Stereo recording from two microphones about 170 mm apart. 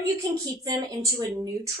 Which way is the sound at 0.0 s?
20° right (ahead or behind).